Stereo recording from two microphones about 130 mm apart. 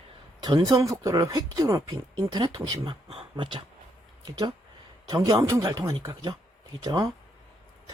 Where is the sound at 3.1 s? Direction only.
45° right (ahead or behind).